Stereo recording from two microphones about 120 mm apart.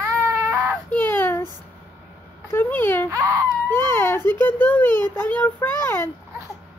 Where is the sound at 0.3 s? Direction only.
25° right (ahead or behind).